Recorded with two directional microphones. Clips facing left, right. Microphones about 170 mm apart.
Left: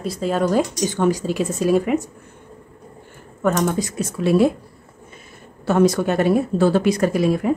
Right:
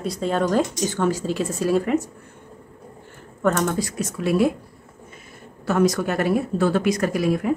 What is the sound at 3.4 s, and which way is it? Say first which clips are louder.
Speech: left 2 dB; 15° left (ahead or behind).